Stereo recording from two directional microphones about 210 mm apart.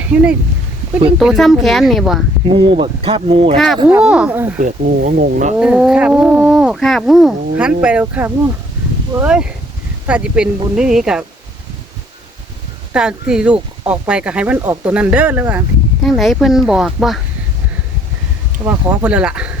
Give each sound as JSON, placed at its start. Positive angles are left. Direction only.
{"t": 0.1, "sound": "speech", "side_deg": -5}
{"t": 2.5, "sound": "speech", "side_deg": -25}
{"t": 3.8, "sound": "speech", "side_deg": -5}
{"t": 4.6, "sound": "speech", "side_deg": -40}
{"t": 5.5, "sound": "speech", "side_deg": -5}
{"t": 12.9, "sound": "speech", "side_deg": -5}
{"t": 18.6, "sound": "speech", "side_deg": -10}